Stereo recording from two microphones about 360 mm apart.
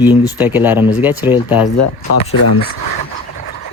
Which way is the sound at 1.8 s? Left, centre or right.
Left.